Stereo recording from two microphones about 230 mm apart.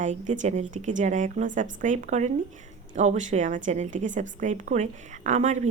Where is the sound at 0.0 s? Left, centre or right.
Right.